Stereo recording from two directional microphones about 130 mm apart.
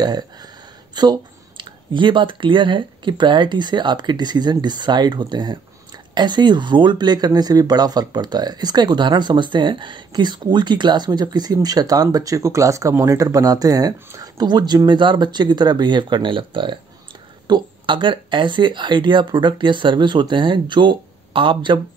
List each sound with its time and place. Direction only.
0.0 s speech: 30° right (ahead or behind)